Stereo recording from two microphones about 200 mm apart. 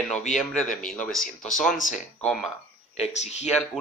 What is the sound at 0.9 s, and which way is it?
Speech, 5° left (ahead or behind).